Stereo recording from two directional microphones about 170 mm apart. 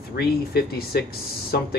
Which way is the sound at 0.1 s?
70° left (ahead or behind).